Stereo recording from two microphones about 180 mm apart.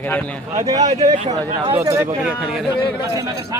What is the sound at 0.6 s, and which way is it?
Speech, 20° right (ahead or behind).